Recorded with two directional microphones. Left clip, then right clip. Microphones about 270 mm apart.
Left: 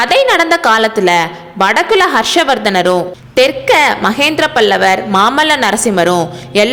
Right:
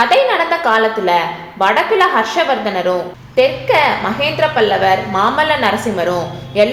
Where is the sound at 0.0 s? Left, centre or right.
Left.